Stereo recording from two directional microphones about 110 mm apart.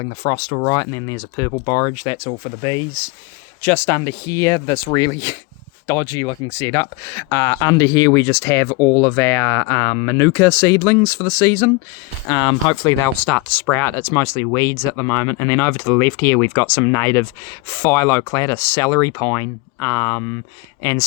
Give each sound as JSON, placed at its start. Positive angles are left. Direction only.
{"t": 0.0, "sound": "speech", "side_deg": 50}
{"t": 0.7, "sound": "speech", "side_deg": 30}
{"t": 3.6, "sound": "speech", "side_deg": 20}
{"t": 12.3, "sound": "speech", "side_deg": 40}
{"t": 13.2, "sound": "speech", "side_deg": 15}